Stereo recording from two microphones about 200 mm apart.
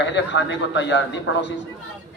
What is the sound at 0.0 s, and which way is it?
A man's voice, 60° left (ahead or behind).